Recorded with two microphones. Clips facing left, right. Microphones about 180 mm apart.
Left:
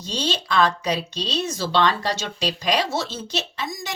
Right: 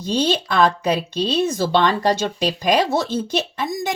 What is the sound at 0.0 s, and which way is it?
A woman's voice, 55° right (ahead or behind).